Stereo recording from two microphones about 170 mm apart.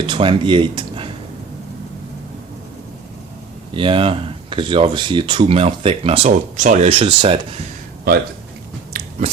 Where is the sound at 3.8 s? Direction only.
30° right (ahead or behind).